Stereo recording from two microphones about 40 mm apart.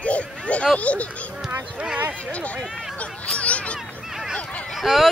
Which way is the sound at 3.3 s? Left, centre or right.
Left.